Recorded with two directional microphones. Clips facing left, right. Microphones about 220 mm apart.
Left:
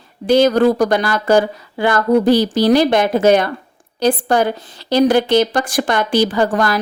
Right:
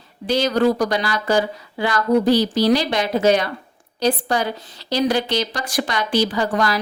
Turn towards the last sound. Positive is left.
turn(degrees=50)  # may be behind; listen again after turning